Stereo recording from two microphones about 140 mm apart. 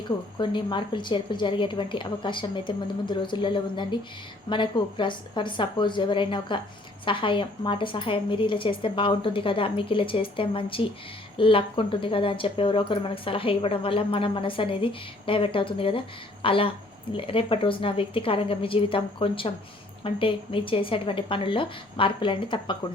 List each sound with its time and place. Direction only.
0.3 s speech: 35° left (ahead or behind)